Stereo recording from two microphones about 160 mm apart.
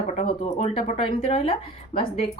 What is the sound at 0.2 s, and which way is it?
Speech, 40° left (ahead or behind).